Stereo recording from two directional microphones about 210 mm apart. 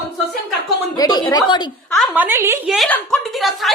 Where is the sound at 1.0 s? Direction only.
20° left (ahead or behind).